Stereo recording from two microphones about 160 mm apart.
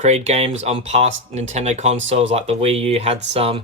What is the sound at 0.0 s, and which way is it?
Speech, 45° right (ahead or behind).